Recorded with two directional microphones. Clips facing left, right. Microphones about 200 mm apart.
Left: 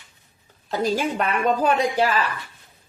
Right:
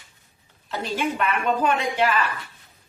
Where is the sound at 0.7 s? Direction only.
40° left (ahead or behind).